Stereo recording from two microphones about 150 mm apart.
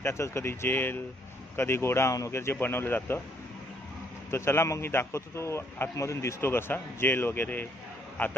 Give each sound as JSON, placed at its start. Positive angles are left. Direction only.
{"t": 0.0, "sound": "a man's voice", "side_deg": 20}
{"t": 4.3, "sound": "a man's voice", "side_deg": 15}